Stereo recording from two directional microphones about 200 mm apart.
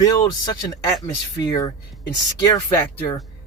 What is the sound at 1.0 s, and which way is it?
Speech, 20° left (ahead or behind).